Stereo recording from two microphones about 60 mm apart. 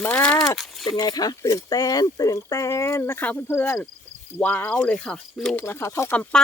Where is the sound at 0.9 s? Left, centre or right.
Left.